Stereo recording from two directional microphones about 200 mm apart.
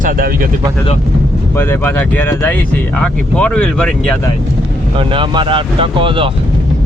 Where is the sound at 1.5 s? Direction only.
10° left (ahead or behind).